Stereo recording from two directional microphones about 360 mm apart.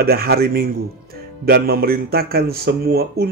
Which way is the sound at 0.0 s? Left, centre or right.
Right.